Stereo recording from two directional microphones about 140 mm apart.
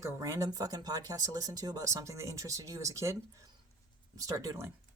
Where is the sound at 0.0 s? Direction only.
25° right (ahead or behind).